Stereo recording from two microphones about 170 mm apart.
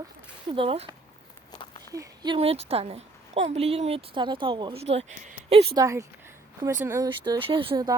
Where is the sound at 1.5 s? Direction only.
30° left (ahead or behind).